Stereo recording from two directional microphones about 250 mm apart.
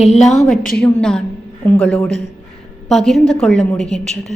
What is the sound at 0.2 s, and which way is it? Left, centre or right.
A woman's voice, centre.